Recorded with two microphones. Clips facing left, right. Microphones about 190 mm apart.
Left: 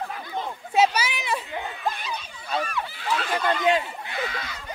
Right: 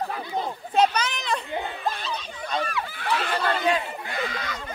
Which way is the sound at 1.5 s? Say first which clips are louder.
Right 3 dB; 35° right (ahead or behind).